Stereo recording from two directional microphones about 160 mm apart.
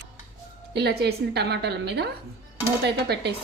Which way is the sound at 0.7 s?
85° right.